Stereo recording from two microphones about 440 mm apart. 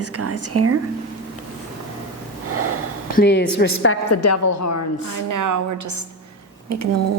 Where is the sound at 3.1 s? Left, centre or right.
Left.